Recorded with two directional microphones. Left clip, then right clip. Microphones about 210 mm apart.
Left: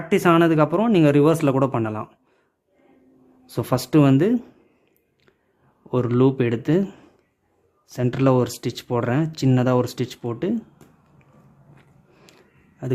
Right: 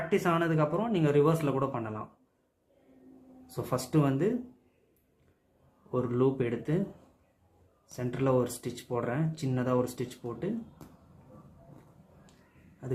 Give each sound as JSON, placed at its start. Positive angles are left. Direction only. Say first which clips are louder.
{"t": 0.1, "sound": "speech", "louder": "left 12 dB", "side_deg": 45}
{"t": 3.4, "sound": "speech", "louder": "left 9 dB", "side_deg": 45}
{"t": 5.9, "sound": "speech", "louder": "left 9 dB", "side_deg": 45}
{"t": 7.9, "sound": "speech", "louder": "left 9 dB", "side_deg": 45}